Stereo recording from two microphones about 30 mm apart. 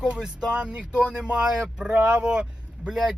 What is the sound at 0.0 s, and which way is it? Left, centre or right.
Speech, right.